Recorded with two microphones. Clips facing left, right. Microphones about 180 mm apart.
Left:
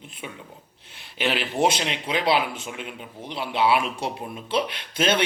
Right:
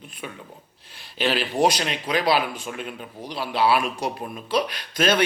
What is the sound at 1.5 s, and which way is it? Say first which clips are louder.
A man's voice: right 1 dB; 25° left (ahead or behind).